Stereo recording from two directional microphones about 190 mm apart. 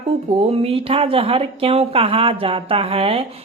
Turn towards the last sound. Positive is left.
turn(degrees=-30)  # may be behind; listen again after turning